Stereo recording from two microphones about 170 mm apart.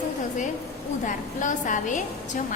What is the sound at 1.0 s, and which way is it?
Speech, 50° left (ahead or behind).